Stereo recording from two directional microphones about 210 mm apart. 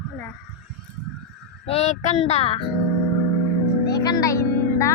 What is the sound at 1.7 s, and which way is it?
Speech, 30° left (ahead or behind).